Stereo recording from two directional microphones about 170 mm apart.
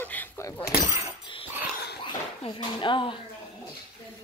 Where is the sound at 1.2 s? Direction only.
30° left (ahead or behind).